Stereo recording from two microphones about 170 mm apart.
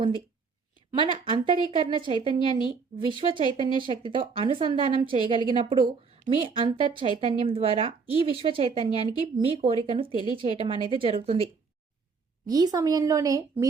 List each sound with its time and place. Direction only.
0.9 s a woman's voice: 30° right (ahead or behind)
12.5 s a woman's voice: 20° right (ahead or behind)